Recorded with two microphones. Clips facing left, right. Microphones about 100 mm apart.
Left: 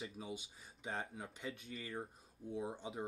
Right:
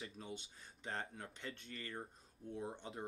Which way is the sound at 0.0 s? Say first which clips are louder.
Left 3 dB; 5° left (ahead or behind).